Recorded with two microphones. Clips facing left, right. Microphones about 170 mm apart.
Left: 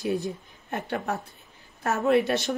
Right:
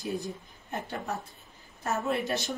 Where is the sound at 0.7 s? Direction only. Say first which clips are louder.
Left 5 dB; 65° left (ahead or behind).